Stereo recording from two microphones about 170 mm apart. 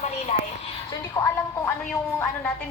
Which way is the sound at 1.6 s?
5° left (ahead or behind).